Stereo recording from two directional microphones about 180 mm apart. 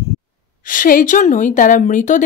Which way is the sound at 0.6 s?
50° left (ahead or behind).